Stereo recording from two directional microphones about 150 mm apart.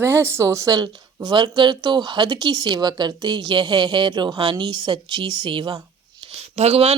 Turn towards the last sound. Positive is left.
turn(degrees=-45)  # may be behind; listen again after turning